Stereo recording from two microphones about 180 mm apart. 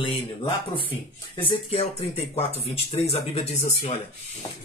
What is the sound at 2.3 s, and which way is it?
Speech, 35° left (ahead or behind).